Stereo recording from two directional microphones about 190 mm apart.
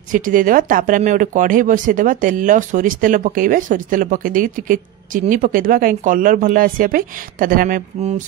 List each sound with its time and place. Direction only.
0.1 s speech: 45° right (ahead or behind)